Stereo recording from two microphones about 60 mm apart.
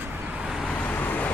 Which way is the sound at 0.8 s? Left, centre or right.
Left.